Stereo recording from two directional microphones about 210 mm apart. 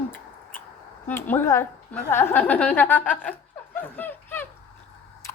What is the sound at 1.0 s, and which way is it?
A woman's voice, 10° left (ahead or behind).